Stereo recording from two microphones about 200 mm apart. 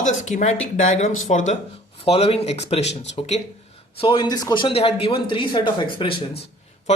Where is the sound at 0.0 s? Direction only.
35° left (ahead or behind).